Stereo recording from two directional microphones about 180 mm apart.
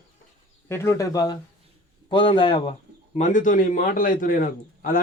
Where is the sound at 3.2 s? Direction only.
45° left (ahead or behind).